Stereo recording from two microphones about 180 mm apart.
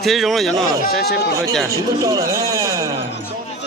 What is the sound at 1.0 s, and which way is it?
Speech, 65° left (ahead or behind).